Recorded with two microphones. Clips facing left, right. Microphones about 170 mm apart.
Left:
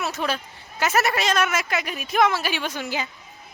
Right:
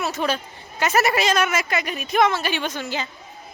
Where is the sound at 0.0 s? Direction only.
Centre (ahead or behind).